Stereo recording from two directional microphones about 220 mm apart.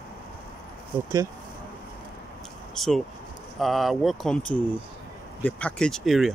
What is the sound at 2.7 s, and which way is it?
Speech, centre (ahead or behind).